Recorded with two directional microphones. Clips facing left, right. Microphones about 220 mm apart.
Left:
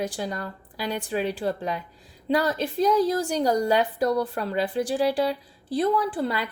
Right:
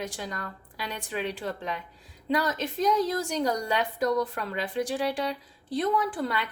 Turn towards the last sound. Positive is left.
turn(degrees=30)  # may be behind; listen again after turning